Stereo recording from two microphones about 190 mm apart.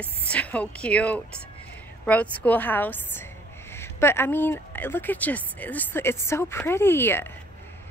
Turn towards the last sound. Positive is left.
turn(degrees=10)  # may be behind; listen again after turning